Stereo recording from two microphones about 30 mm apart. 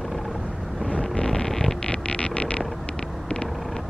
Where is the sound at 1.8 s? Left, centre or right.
Left.